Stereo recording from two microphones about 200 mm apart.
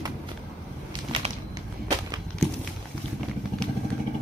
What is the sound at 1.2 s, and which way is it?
Whip, 30° right (ahead or behind).